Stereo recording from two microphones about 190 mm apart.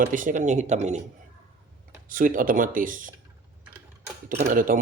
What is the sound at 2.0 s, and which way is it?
Speech, 45° right (ahead or behind).